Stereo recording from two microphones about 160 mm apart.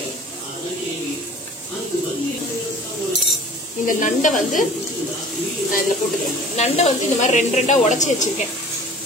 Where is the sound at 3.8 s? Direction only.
55° left (ahead or behind).